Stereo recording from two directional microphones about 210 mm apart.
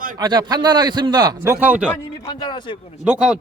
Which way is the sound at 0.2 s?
20° right (ahead or behind).